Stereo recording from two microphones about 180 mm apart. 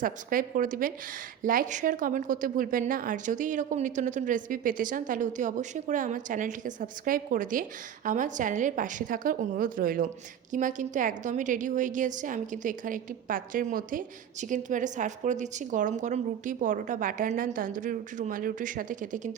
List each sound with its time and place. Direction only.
0.0 s a woman's voice: 50° right (ahead or behind)